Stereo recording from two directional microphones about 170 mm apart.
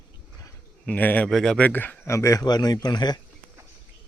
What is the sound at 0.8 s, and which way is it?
Speech, 10° left (ahead or behind).